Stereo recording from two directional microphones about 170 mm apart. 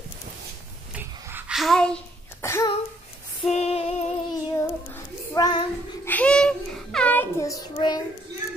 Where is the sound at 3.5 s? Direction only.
40° left (ahead or behind).